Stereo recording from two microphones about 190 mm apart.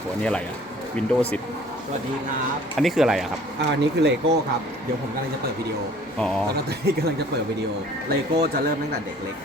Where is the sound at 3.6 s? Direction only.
65° right (ahead or behind).